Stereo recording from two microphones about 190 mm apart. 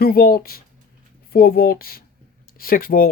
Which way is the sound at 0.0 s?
55° left (ahead or behind).